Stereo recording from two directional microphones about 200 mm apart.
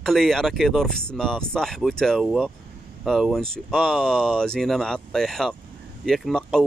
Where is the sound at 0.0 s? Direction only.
Centre (ahead or behind).